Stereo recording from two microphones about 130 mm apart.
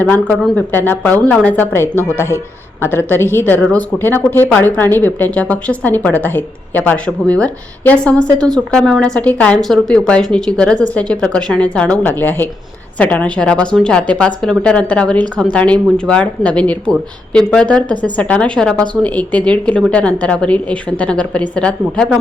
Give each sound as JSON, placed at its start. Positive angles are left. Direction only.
{"t": 0.0, "sound": "a woman's voice", "side_deg": 10}